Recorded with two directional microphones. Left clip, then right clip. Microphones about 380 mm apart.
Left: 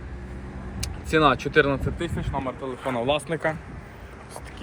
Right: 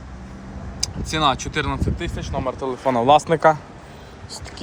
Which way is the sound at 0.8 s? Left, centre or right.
Right.